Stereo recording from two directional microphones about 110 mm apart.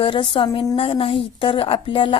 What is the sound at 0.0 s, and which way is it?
A woman's voice, 50° left (ahead or behind).